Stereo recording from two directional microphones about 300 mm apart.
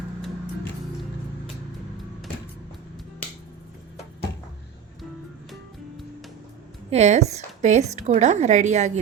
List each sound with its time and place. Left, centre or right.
6.9 s a woman's voice: right